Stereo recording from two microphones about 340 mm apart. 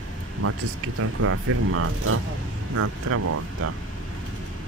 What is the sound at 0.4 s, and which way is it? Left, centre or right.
Speech, right.